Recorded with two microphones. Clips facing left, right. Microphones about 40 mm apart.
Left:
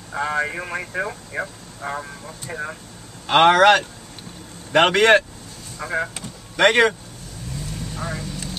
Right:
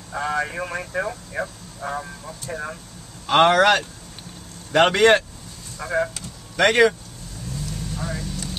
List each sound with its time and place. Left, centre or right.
0.1 s speech: centre
7.9 s vehicle: centre